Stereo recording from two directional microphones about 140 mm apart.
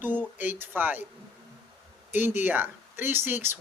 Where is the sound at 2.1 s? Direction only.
15° right (ahead or behind).